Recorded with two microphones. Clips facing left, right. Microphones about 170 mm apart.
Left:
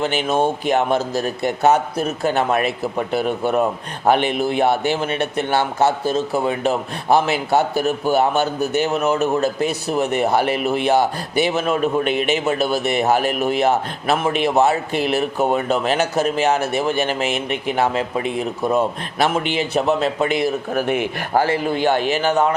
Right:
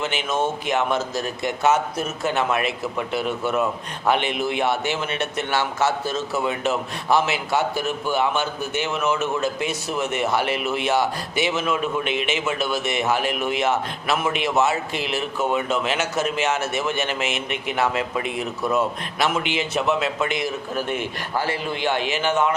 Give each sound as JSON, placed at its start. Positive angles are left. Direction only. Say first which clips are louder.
{"t": 0.0, "sound": "a man's voice", "louder": "left 5 dB", "side_deg": 40}
{"t": 20.8, "sound": "speech", "louder": "left 6 dB", "side_deg": 10}
{"t": 21.2, "sound": "a man's voice", "louder": "left 7 dB", "side_deg": 45}